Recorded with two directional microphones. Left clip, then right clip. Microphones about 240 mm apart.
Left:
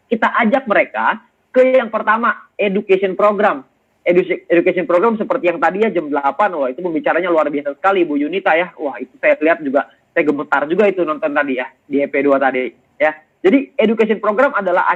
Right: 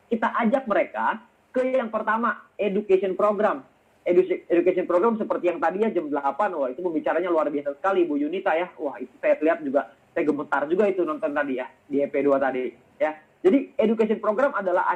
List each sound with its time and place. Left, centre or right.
0.1 s a man's voice: left